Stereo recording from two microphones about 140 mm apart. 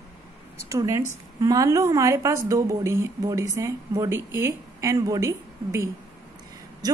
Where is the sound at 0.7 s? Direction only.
25° right (ahead or behind).